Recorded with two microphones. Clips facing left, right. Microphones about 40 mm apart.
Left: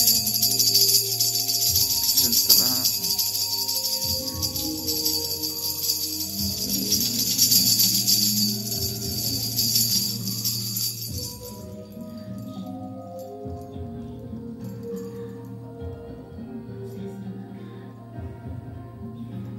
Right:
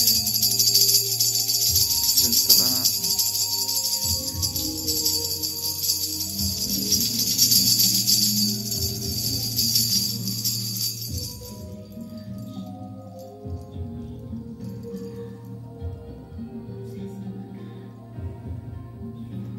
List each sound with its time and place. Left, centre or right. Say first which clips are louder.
0.0 s music: even; centre
14.6 s music: left 1 dB; centre